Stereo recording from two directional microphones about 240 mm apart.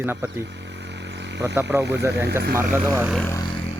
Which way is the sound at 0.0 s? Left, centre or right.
Centre.